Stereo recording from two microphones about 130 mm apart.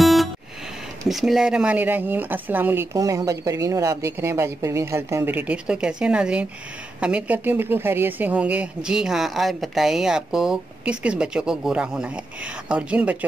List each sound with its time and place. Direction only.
0.0 s music: centre (ahead or behind)
1.0 s speech: centre (ahead or behind)